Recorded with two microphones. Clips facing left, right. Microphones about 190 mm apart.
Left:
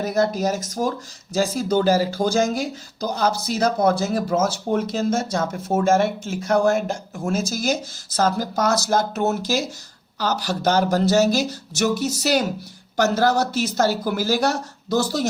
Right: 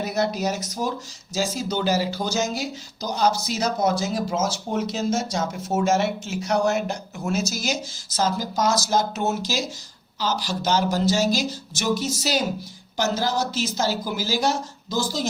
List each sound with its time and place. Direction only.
0.0 s speech: 45° left (ahead or behind); by 15.3 s 65° left (ahead or behind)